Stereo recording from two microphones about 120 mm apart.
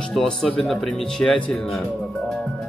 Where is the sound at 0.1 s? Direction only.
5° left (ahead or behind).